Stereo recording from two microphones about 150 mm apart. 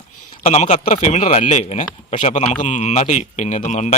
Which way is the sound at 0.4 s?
50° left (ahead or behind).